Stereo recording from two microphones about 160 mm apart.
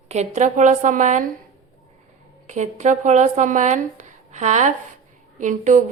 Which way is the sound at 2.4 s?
45° right (ahead or behind).